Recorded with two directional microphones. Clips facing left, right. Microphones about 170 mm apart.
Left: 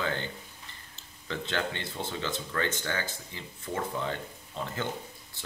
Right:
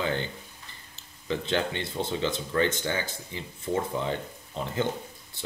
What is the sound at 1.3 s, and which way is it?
Speech, 20° right (ahead or behind).